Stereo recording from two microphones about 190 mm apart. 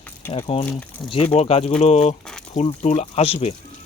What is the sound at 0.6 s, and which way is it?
Speech, 5° left (ahead or behind).